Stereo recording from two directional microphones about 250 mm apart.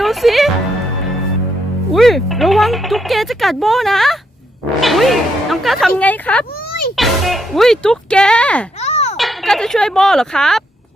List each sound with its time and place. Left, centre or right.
0.0 s music: centre
1.9 s speech: centre
8.8 s music: left
9.1 s speech: centre